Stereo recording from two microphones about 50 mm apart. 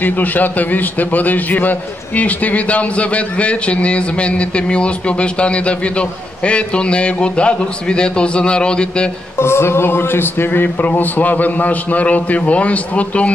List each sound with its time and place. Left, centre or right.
0.0 s a man's voice: left; by 9.1 s centre
9.4 s speech: left